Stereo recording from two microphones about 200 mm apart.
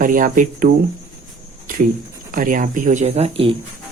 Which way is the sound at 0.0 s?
40° right (ahead or behind).